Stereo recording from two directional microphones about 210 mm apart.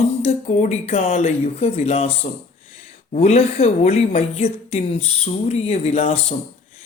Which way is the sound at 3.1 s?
30° left (ahead or behind).